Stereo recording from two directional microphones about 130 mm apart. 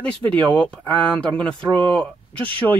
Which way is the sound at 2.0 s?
10° left (ahead or behind).